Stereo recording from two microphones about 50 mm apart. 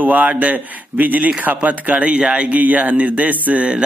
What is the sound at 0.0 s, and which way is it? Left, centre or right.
A man's voice, right.